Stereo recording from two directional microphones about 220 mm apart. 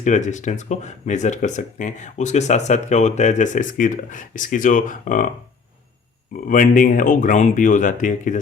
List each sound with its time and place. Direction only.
0.0 s speech: 35° left (ahead or behind)
6.3 s speech: 40° left (ahead or behind)